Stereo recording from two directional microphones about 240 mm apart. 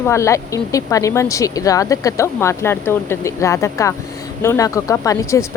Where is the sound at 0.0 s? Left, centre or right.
Centre.